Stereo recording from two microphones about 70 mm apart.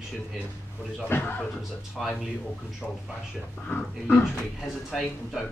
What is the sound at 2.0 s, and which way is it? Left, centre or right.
Speech, centre.